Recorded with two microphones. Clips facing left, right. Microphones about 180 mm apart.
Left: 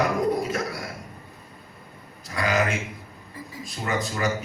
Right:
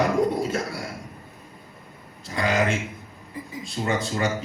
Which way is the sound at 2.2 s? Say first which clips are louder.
Right 1 dB; 25° right (ahead or behind).